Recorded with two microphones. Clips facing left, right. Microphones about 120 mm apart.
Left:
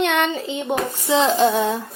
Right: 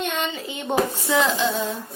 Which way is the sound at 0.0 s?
80° left.